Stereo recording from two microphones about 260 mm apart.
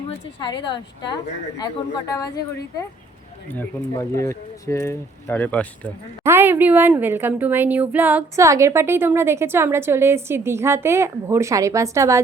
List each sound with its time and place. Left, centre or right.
0.1 s speech: centre
3.5 s speech: centre
6.2 s a woman's voice: centre